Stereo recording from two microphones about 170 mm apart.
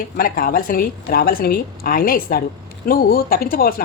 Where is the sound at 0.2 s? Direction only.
55° left (ahead or behind).